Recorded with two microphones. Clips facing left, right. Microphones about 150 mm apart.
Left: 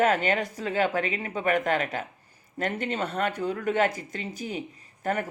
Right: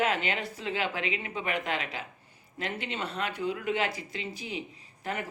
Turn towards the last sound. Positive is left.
turn(degrees=45)  # may be behind; listen again after turning